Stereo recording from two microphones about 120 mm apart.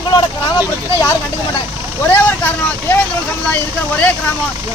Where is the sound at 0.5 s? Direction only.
25° left (ahead or behind).